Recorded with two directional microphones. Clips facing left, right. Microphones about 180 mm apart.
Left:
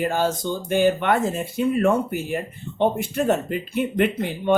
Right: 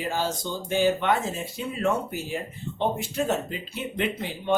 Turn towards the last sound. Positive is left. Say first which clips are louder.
# left 7 dB
turn(degrees=55)  # may be behind; listen again after turning